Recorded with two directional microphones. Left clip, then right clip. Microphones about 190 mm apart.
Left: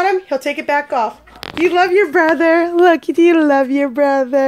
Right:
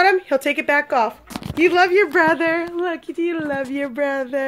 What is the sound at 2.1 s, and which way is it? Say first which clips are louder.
Speech: left 4 dB; 30° left (ahead or behind).